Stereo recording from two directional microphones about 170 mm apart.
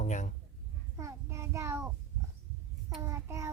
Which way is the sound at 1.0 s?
20° right (ahead or behind).